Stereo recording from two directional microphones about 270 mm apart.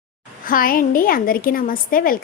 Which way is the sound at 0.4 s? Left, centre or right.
Left.